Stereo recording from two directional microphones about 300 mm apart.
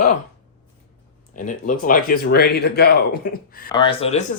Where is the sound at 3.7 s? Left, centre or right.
Centre.